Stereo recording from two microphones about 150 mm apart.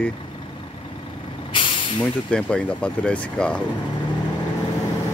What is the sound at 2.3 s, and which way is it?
Speech, 10° left (ahead or behind).